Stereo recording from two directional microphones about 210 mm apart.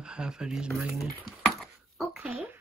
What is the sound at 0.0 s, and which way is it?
Speech, 5° right (ahead or behind).